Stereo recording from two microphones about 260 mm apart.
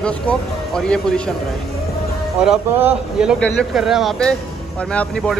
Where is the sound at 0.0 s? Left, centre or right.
Centre.